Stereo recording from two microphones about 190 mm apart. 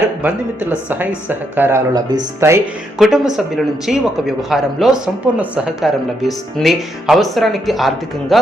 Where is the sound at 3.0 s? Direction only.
Centre (ahead or behind).